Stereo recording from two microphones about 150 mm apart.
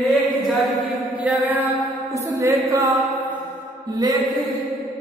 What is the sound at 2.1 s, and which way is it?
Speech, 20° right (ahead or behind).